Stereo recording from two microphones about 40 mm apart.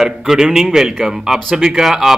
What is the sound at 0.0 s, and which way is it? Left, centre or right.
A man's voice, centre.